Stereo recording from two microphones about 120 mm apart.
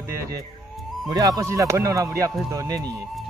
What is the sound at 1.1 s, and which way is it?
Speech, 30° right (ahead or behind).